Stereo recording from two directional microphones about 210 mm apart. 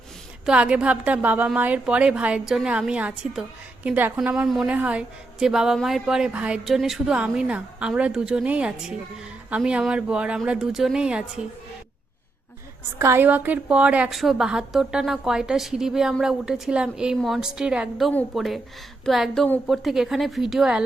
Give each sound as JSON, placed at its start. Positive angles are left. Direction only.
{"t": 0.4, "sound": "a woman's voice", "side_deg": -5}
{"t": 13.0, "sound": "a woman's voice", "side_deg": -10}